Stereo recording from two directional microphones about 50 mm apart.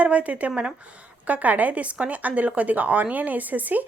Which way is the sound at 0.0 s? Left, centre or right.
Right.